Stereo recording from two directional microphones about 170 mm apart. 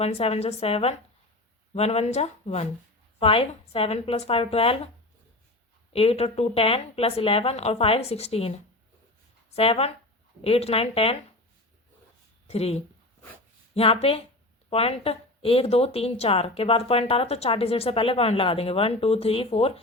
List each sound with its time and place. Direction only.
0.0 s speech: 40° left (ahead or behind)
5.9 s speech: 35° left (ahead or behind)
12.5 s speech: 40° left (ahead or behind)